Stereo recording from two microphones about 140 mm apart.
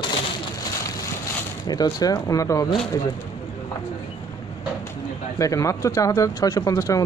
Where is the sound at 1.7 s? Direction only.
30° left (ahead or behind).